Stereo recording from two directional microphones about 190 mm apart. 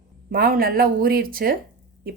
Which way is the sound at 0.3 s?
50° right (ahead or behind).